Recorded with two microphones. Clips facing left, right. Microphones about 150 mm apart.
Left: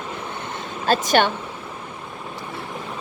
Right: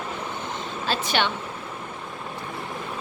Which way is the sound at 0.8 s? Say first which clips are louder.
Left 7 dB; 45° left (ahead or behind).